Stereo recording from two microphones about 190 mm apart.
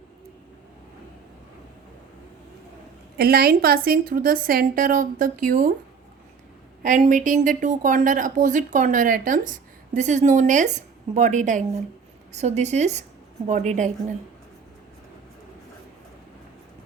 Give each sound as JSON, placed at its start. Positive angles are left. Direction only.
{"t": 3.2, "sound": "a woman's voice", "side_deg": -55}
{"t": 6.8, "sound": "a woman's voice", "side_deg": -40}